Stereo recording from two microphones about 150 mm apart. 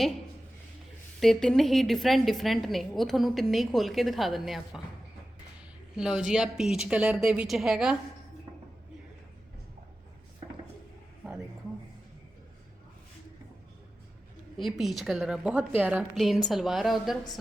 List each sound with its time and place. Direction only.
1.2 s a woman's voice: 5° left (ahead or behind)
6.0 s a woman's voice: 5° right (ahead or behind)
14.5 s a woman's voice: centre (ahead or behind)
16.1 s a woman's voice: centre (ahead or behind)